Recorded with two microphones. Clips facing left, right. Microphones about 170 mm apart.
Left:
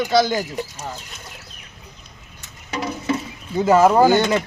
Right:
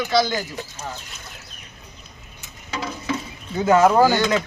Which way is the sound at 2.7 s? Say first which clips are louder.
Left 4 dB; 25° left (ahead or behind).